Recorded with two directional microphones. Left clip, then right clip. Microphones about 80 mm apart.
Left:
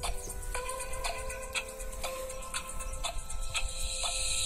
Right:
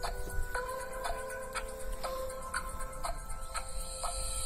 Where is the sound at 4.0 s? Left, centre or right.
Right.